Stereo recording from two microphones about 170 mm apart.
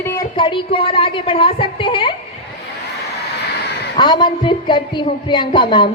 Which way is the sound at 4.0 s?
25° left (ahead or behind).